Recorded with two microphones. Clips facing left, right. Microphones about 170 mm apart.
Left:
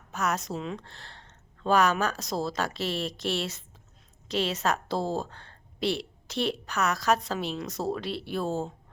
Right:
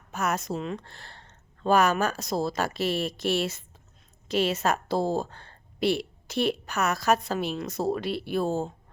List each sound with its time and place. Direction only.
0.1 s a woman's voice: 5° right (ahead or behind)
3.1 s speech: 55° right (ahead or behind)
4.3 s a woman's voice: 5° right (ahead or behind)
5.8 s a sound: 50° right (ahead or behind)
6.4 s a woman's voice: 5° right (ahead or behind)